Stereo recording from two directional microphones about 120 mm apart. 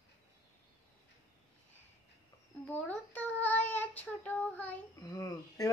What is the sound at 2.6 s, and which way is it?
Child singing, 10° left (ahead or behind).